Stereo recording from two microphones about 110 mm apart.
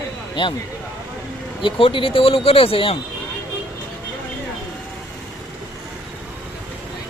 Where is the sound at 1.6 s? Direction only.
50° left (ahead or behind).